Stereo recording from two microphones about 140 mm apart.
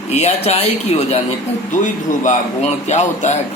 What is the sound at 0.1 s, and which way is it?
A man's voice, 50° left (ahead or behind).